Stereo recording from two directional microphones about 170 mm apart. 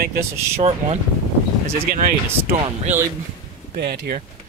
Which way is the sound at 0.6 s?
40° right (ahead or behind).